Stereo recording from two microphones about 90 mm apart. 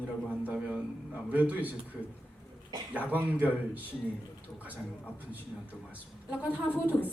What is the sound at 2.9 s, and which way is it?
Speech, 20° right (ahead or behind).